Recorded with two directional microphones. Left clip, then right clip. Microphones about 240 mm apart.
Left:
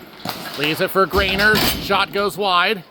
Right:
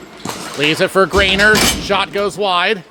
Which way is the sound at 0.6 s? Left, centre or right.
Centre.